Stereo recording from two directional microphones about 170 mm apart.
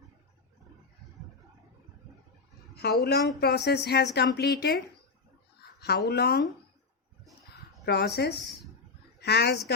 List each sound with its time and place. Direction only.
2.7 s speech: 70° left (ahead or behind)
6.1 s speech: 70° left (ahead or behind)
7.5 s a sound: 70° left (ahead or behind)
9.2 s speech: 75° left (ahead or behind)